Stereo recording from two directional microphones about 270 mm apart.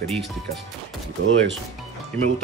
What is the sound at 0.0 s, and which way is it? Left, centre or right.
Speech, centre.